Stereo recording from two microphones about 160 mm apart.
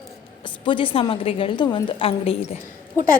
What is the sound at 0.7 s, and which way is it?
A woman's voice, 35° left (ahead or behind).